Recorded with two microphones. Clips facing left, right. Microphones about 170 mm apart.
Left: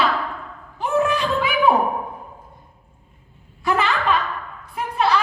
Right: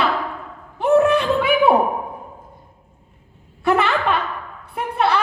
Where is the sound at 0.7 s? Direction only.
60° right (ahead or behind).